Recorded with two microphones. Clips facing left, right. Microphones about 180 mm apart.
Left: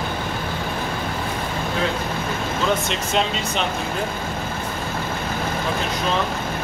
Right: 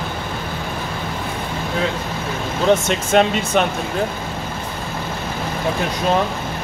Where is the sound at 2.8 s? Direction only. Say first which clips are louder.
Right 6 dB; 50° right (ahead or behind).